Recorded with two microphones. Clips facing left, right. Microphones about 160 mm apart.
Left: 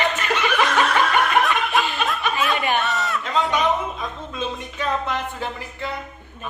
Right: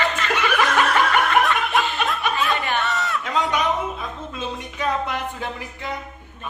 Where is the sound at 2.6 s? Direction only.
20° left (ahead or behind).